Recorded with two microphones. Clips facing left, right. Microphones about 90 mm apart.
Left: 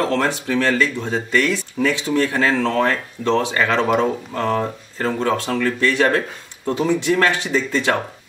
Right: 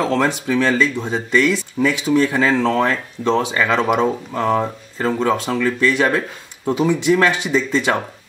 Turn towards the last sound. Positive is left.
turn(degrees=-15)  # may be behind; listen again after turning